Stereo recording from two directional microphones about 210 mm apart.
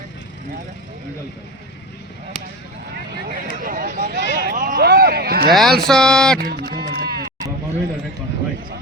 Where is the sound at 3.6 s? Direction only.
40° right (ahead or behind).